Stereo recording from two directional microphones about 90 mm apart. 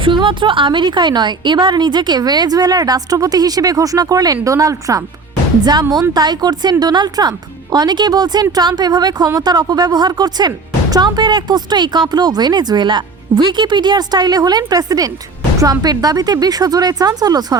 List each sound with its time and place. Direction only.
0.0 s a woman's voice: 65° right (ahead or behind); by 5.0 s 40° right (ahead or behind)
5.9 s a woman's voice: 50° right (ahead or behind)